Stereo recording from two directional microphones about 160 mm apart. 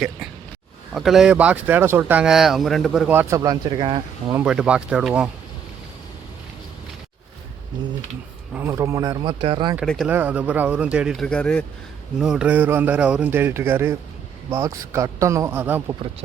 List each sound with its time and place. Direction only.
0.9 s speech: centre (ahead or behind)
3.1 s speech: 15° right (ahead or behind); by 4.4 s 30° right (ahead or behind)
4.4 s speech: 5° right (ahead or behind)
8.5 s a man's voice: 15° right (ahead or behind)
9.2 s speech: 35° right (ahead or behind)
9.8 s speech: 5° left (ahead or behind)
10.1 s a man's voice: 10° right (ahead or behind); by 11.6 s 5° left (ahead or behind)
12.2 s a man's voice: 5° right (ahead or behind)